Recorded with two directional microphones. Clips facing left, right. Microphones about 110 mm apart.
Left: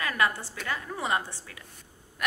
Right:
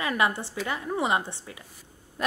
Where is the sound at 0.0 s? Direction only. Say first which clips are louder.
Right 2 dB; 20° right (ahead or behind).